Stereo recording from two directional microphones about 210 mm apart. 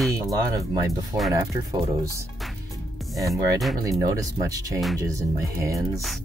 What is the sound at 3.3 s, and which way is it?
Speech, centre (ahead or behind).